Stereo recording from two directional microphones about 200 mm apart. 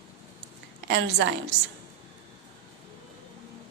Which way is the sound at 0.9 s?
60° right (ahead or behind).